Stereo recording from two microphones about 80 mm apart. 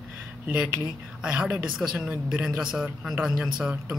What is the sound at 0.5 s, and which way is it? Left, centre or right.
Speech, right.